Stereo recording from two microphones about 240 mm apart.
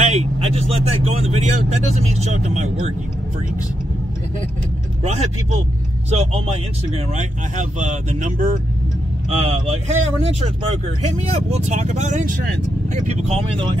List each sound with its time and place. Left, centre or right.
0.1 s speech: right
5.0 s speech: right